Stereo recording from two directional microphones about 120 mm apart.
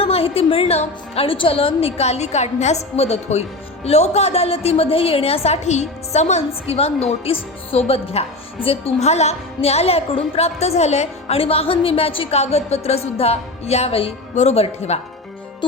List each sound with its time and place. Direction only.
0.0 s a woman's voice: 55° left (ahead or behind)